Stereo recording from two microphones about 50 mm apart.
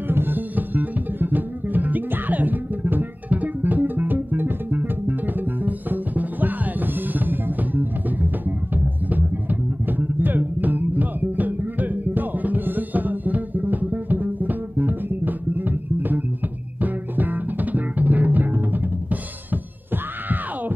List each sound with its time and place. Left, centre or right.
0.1 s music: right